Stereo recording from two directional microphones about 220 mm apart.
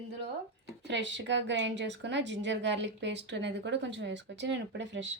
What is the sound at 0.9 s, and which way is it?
A woman's voice, 55° right (ahead or behind).